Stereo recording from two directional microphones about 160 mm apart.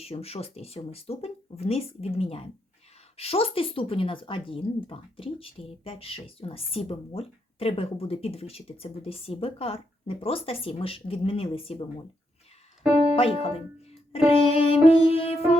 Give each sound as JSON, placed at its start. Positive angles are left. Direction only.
{"t": 0.0, "sound": "speech", "side_deg": 40}
{"t": 13.1, "sound": "speech", "side_deg": 35}